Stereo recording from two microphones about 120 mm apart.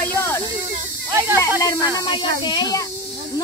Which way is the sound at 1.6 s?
30° left (ahead or behind).